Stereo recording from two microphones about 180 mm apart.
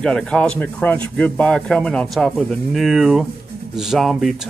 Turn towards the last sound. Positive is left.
turn(degrees=0)  # may be behind; listen again after turning